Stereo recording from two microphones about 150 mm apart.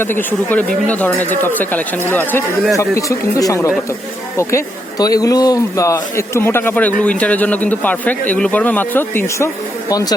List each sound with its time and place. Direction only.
0.0 s a man's voice: 15° left (ahead or behind)